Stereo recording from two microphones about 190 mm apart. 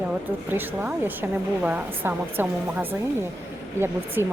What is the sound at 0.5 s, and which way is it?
A woman's voice, 10° right (ahead or behind).